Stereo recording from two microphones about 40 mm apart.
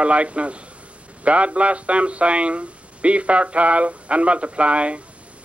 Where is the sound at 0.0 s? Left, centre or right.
Right.